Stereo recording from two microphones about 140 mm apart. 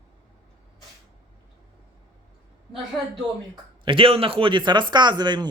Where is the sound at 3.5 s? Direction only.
40° right (ahead or behind).